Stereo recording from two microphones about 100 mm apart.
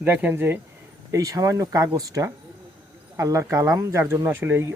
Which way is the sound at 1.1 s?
35° right (ahead or behind).